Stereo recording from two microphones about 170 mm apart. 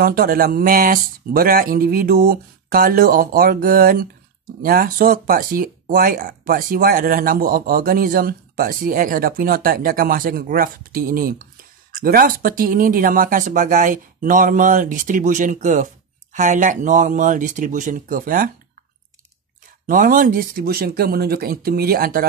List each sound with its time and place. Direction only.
0.0 s speech: 60° right (ahead or behind)
19.9 s speech: 55° right (ahead or behind)